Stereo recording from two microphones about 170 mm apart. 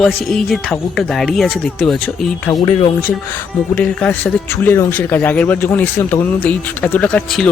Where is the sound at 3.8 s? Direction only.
10° left (ahead or behind).